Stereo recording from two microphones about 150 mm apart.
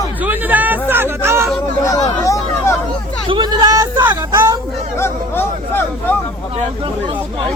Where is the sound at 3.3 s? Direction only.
30° right (ahead or behind).